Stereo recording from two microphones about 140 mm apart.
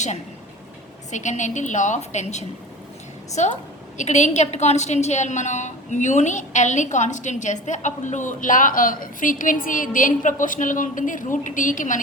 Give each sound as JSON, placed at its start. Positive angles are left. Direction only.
{"t": 1.1, "sound": "a woman's voice", "side_deg": 60}